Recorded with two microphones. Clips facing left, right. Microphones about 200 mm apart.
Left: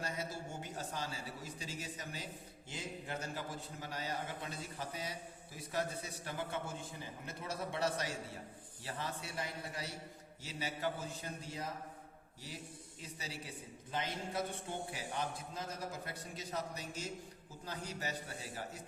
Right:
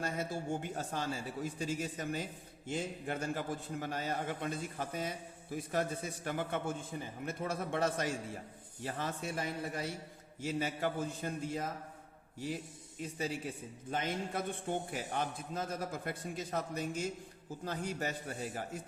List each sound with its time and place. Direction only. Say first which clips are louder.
0.0 s a man's voice: right 5 dB; 50° right (ahead or behind)
13.0 s a man's voice: right 10 dB; 50° right (ahead or behind)